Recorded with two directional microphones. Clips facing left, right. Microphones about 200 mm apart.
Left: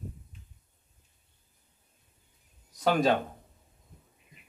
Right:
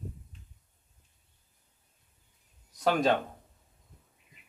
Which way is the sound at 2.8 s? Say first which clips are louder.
Left 1 dB; centre (ahead or behind).